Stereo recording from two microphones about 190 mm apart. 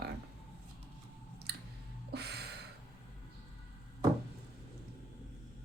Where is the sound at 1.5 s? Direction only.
60° right (ahead or behind).